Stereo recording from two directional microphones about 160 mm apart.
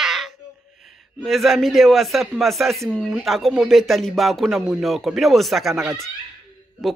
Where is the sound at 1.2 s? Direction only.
Centre (ahead or behind).